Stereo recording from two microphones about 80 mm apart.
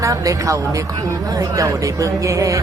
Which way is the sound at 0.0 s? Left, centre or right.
Right.